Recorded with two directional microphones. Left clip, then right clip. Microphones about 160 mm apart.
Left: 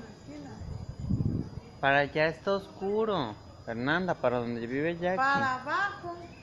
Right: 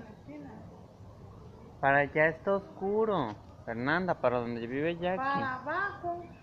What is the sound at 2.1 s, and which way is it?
Speech, 5° left (ahead or behind).